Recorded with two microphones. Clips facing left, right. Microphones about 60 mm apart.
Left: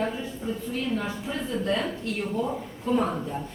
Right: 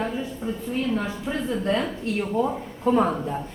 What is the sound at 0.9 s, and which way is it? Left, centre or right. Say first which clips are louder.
Speech: right 3 dB; right.